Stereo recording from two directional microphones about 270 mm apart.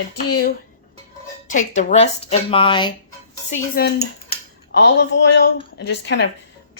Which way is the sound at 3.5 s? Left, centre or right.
Left.